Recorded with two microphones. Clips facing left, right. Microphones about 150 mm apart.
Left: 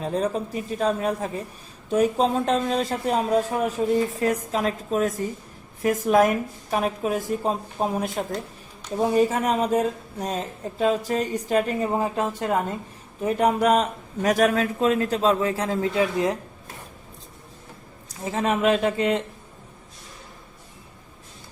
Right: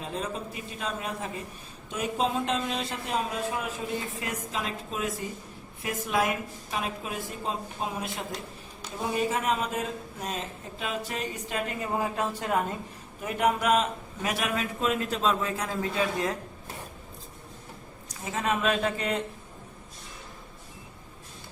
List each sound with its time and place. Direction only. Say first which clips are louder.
0.0 s a woman's voice: left 9 dB; 35° left (ahead or behind)
11.9 s speech: left 5 dB; 25° left (ahead or behind)
13.2 s speech: left 5 dB; 35° left (ahead or behind)
18.3 s speech: left 6 dB; 30° left (ahead or behind)